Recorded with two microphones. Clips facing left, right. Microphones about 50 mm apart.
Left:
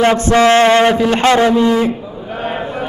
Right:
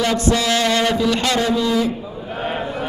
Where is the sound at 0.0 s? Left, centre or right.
Left.